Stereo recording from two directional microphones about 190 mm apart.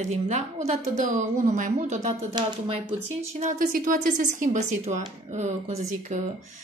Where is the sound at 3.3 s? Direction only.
40° right (ahead or behind).